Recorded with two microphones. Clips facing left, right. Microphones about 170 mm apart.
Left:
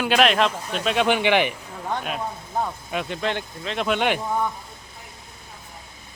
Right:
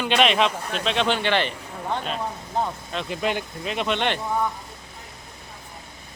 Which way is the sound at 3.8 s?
5° left (ahead or behind).